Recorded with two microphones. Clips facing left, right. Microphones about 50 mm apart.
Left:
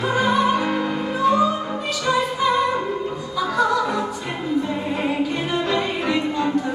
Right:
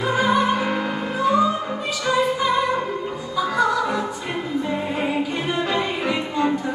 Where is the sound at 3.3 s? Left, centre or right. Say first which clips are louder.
Even; centre.